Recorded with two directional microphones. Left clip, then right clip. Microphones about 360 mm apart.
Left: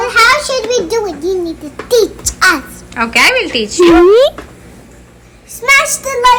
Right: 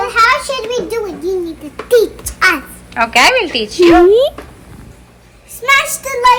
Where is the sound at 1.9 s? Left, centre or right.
Centre.